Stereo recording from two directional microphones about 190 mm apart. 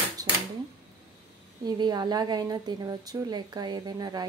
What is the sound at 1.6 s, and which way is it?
A woman's voice, 20° right (ahead or behind).